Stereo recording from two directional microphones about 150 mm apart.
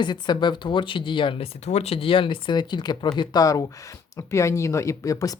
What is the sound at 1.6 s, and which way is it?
Speech, 45° left (ahead or behind).